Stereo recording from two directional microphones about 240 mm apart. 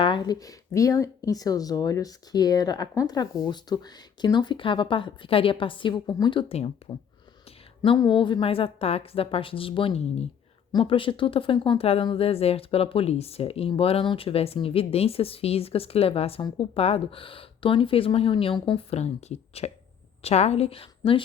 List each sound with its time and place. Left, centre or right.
0.0 s speech: centre
7.8 s speech: centre